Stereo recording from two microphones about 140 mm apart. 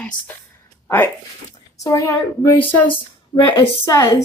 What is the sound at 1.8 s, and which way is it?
Speech, 25° left (ahead or behind).